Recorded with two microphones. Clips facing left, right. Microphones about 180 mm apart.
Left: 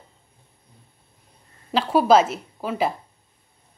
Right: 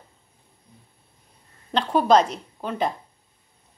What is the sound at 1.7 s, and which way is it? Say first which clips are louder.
A woman's voice: left 2 dB; 5° left (ahead or behind).